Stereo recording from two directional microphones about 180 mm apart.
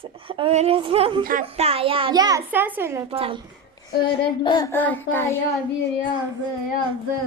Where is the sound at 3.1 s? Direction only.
30° right (ahead or behind).